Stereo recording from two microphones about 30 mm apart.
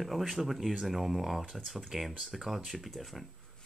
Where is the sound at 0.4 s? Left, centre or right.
Centre.